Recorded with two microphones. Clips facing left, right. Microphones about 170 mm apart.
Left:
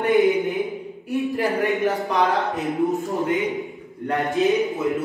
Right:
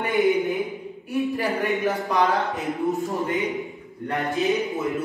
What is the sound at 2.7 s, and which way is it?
Speech, 20° left (ahead or behind).